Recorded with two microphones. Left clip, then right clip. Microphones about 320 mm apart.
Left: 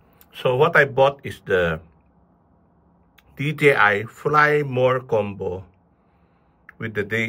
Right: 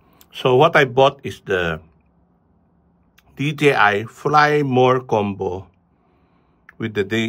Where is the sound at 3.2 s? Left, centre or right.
Centre.